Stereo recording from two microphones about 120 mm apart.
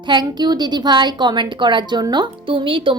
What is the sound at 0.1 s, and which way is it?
A woman's voice, 40° right (ahead or behind).